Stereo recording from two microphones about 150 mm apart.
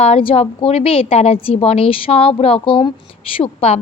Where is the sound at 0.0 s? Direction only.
40° left (ahead or behind).